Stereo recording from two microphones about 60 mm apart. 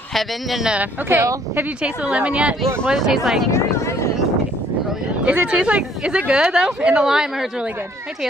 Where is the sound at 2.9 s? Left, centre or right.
Centre.